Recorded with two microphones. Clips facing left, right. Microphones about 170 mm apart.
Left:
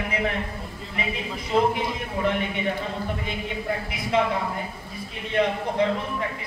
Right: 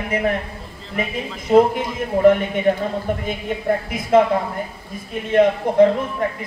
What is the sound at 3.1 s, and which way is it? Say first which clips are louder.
Speech: right 7 dB; 45° right (ahead or behind).